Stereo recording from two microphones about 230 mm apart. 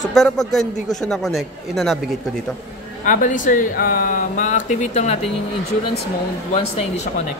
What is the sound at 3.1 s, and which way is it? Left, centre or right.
Speech, left.